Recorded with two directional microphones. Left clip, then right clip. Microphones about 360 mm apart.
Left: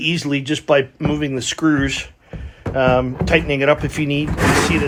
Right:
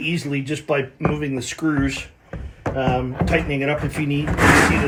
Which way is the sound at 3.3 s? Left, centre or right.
Left.